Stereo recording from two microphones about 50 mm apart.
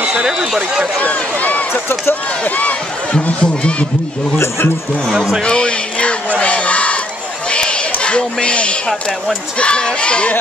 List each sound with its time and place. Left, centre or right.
0.1 s speech: centre
1.0 s speech: left
1.7 s speech: left
2.4 s speech: left
5.4 s battle cry: centre
7.4 s a sound: centre
9.6 s speech: centre